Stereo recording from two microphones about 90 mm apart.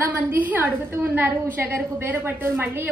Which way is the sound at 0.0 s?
25° right (ahead or behind).